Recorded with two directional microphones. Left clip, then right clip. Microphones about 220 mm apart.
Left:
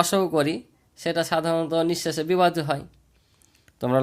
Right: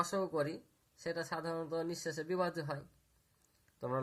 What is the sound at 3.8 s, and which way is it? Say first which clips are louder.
Speech: left 16 dB; 50° left (ahead or behind).